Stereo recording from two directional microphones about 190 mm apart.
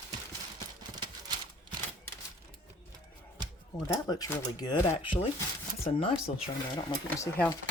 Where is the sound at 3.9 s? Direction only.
20° left (ahead or behind).